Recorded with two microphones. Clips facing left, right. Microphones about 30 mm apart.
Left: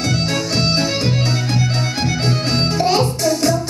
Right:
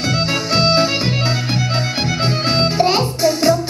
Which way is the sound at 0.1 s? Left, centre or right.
Centre.